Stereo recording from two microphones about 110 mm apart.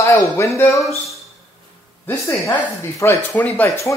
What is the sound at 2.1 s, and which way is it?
Speech, 25° left (ahead or behind).